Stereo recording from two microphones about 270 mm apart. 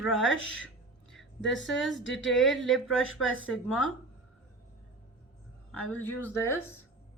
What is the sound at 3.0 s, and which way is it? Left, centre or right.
Speech, left.